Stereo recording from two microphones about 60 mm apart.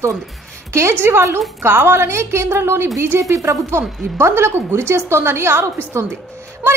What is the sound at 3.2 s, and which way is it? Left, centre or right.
Speech, right.